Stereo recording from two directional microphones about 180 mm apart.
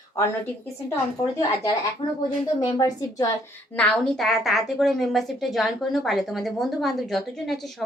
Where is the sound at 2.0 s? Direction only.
25° left (ahead or behind).